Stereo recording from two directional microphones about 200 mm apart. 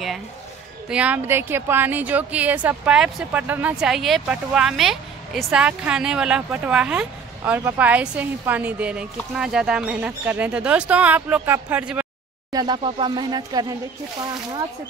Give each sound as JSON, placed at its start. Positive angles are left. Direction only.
{"t": 0.8, "sound": "a woman's voice", "side_deg": -5}
{"t": 12.5, "sound": "speech", "side_deg": -20}